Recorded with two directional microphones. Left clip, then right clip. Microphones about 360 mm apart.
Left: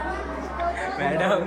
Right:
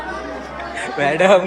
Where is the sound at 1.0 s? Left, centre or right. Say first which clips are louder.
Right 11 dB; centre.